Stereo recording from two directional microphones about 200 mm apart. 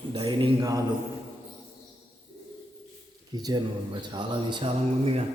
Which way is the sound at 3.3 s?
20° right (ahead or behind).